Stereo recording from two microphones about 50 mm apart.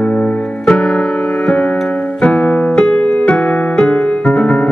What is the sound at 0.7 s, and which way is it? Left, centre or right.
Keyboard, centre.